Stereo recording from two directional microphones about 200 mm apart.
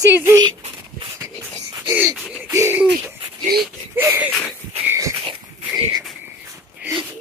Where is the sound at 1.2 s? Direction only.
15° right (ahead or behind).